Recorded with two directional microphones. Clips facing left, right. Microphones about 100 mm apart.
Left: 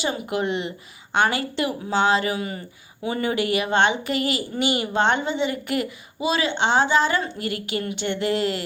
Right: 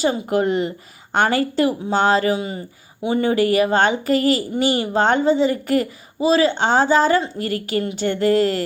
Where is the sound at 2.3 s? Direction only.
25° right (ahead or behind).